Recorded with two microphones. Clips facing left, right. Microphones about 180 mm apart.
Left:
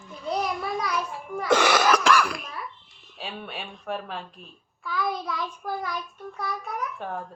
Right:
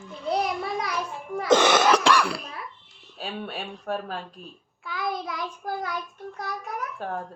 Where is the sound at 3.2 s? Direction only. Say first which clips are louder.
Right 3 dB; 45° right (ahead or behind).